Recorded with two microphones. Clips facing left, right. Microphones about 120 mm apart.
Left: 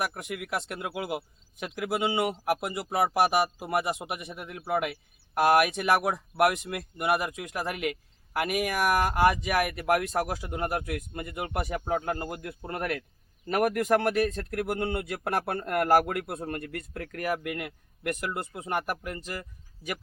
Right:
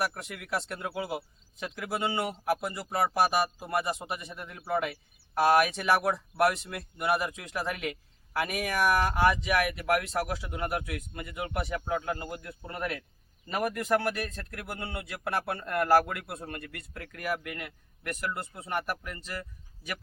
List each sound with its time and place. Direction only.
0.0 s speech: 10° left (ahead or behind)
9.4 s speech: 45° left (ahead or behind)
18.7 s speech: 45° left (ahead or behind)